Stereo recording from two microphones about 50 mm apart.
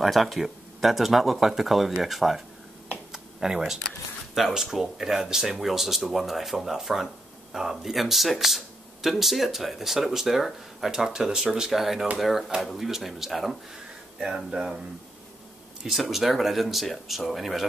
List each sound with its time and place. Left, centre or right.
0.0 s speech: centre
3.1 s a sound: centre
4.4 s speech: centre
11.7 s speech: centre
14.2 s speech: centre
15.8 s speech: centre